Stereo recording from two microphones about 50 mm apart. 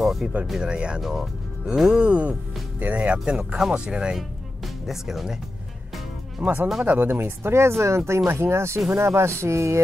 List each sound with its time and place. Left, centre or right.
0.0 s music: centre
0.6 s speech: centre
1.0 s speech: centre
1.9 s speech: right
3.3 s speech: centre
3.7 s speech: right
4.8 s speech: centre
6.4 s speech: right
7.0 s speech: right